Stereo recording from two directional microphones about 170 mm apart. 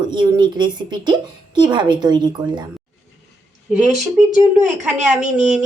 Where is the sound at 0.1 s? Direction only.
25° right (ahead or behind).